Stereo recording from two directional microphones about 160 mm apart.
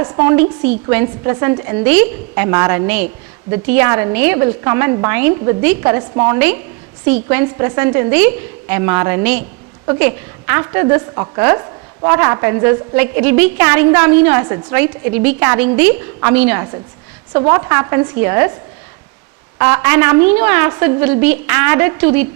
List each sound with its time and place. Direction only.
0.0 s a woman's voice: 15° right (ahead or behind)
19.5 s a woman's voice: 15° right (ahead or behind)